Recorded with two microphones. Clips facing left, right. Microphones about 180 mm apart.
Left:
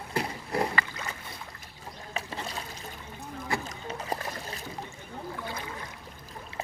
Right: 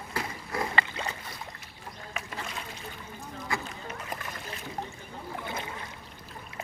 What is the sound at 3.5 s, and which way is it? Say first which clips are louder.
Splash: left 2 dB; 35° left (ahead or behind).